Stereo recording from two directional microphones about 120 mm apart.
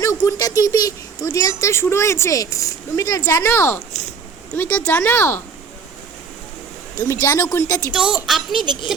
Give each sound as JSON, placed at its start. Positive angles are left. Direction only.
{"t": 0.0, "sound": "speech", "side_deg": 25}
{"t": 7.0, "sound": "speech", "side_deg": 20}
{"t": 7.9, "sound": "a woman's voice", "side_deg": -5}
{"t": 8.5, "sound": "a woman's voice", "side_deg": -40}